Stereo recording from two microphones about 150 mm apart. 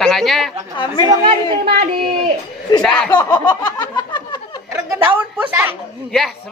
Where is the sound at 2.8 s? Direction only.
5° left (ahead or behind).